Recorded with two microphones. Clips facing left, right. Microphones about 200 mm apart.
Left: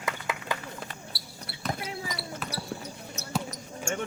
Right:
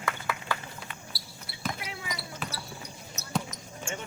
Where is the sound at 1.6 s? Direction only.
35° left (ahead or behind).